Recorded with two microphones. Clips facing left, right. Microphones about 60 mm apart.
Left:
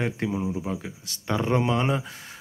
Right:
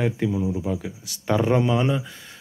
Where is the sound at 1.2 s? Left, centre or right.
Centre.